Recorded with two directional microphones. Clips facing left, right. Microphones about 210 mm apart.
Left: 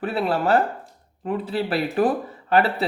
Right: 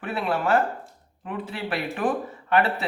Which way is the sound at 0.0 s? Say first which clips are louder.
Left 4 dB; 35° left (ahead or behind).